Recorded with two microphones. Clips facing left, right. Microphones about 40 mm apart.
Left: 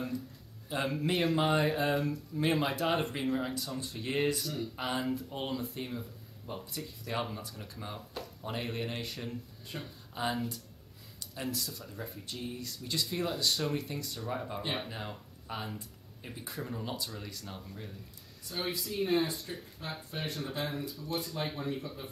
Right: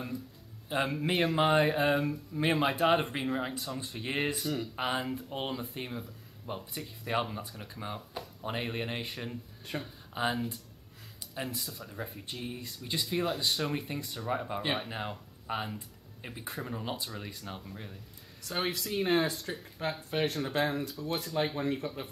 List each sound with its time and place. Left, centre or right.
0.7 s speech: right
1.1 s speech: centre
11.5 s speech: centre
18.4 s speech: right
20.4 s speech: right